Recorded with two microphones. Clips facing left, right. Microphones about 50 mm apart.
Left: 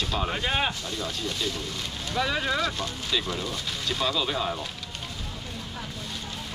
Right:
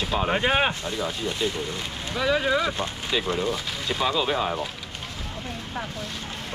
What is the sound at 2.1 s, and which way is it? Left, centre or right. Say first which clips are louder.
Speech: right 4 dB; centre.